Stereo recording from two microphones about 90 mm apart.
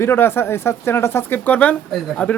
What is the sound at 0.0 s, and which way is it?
Speech, 25° left (ahead or behind).